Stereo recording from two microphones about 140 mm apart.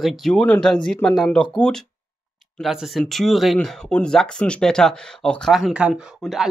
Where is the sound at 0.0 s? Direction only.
Centre (ahead or behind).